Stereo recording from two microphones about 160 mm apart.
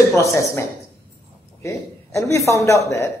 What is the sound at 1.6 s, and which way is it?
A man's voice, 20° left (ahead or behind).